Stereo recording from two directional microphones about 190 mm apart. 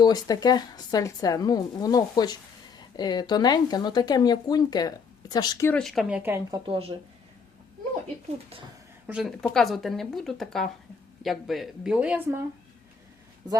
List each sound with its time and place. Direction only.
0.0 s speech: 20° left (ahead or behind)
5.6 s speech: 5° left (ahead or behind); by 6.6 s 10° right (ahead or behind)
6.7 s speech: 30° right (ahead or behind)
9.0 s a woman's voice: 5° right (ahead or behind)